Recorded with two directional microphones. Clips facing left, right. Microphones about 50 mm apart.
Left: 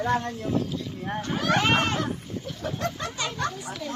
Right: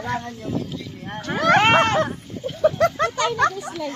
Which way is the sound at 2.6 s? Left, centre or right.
Right.